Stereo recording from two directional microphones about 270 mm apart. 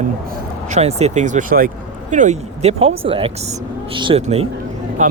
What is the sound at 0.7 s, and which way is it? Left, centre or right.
Speech, right.